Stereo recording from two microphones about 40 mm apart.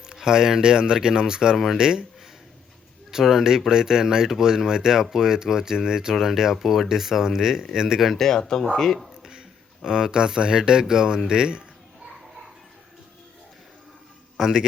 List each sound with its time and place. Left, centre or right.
0.2 s speech: centre
1.5 s speech: centre
1.8 s speech: centre
3.1 s speech: centre
8.1 s speech: centre
9.8 s speech: centre